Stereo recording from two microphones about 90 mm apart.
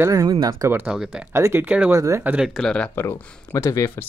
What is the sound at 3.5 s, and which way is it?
Speech, 35° left (ahead or behind).